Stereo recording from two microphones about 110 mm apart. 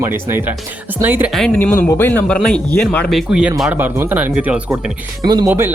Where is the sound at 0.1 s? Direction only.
20° right (ahead or behind).